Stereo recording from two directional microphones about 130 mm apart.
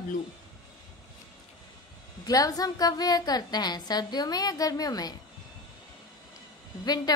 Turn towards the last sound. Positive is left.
turn(degrees=30)  # may be behind; listen again after turning